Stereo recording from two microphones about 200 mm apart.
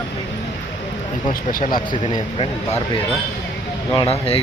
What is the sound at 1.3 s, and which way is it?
Speech, 40° left (ahead or behind).